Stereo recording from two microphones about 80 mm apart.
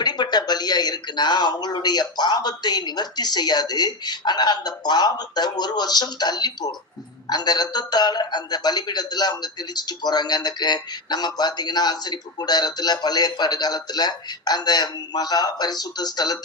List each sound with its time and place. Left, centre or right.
0.0 s speech: left